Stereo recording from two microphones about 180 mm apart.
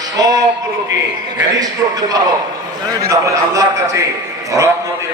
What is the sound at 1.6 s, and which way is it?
A man's voice, 20° right (ahead or behind).